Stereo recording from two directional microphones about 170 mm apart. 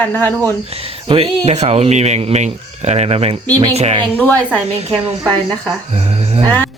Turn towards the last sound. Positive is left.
turn(degrees=-40)  # may be behind; listen again after turning